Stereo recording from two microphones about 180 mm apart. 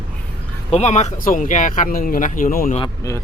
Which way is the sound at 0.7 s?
40° left (ahead or behind).